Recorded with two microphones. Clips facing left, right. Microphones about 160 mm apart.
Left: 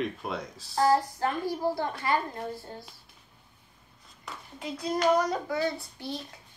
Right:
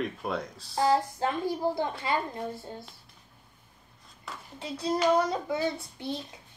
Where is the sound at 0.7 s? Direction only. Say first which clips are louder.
Left 1 dB; 20° right (ahead or behind).